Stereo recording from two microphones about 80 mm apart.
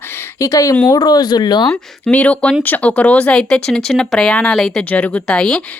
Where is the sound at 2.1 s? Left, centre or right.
Centre.